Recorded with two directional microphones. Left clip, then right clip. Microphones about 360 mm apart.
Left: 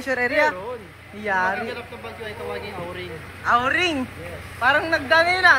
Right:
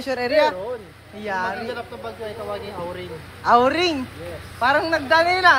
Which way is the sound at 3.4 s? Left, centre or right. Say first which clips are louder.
Right 3 dB; centre.